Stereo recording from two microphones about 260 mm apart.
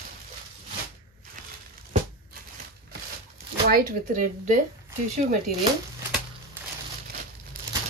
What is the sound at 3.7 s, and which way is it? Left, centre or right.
Speech, right.